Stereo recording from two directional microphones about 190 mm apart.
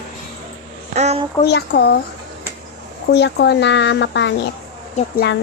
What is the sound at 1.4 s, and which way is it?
Speech, 60° left (ahead or behind).